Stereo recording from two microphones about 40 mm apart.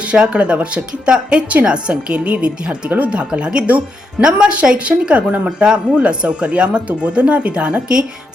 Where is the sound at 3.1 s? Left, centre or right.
Right.